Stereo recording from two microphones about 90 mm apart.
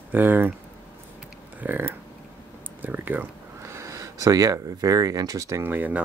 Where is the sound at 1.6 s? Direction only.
20° right (ahead or behind); by 5.6 s 40° right (ahead or behind).